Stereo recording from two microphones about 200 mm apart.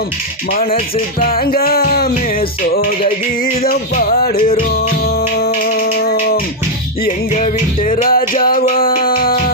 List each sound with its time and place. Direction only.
0.5 s music: 45° left (ahead or behind)
3.6 s music: 45° left (ahead or behind)
7.0 s music: 40° left (ahead or behind)